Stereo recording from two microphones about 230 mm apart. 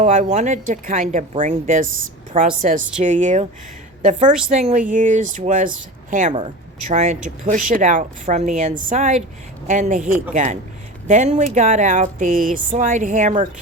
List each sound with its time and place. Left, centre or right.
0.0 s speech: right